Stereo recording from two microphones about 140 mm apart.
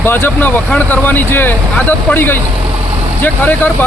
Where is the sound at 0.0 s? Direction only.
15° left (ahead or behind).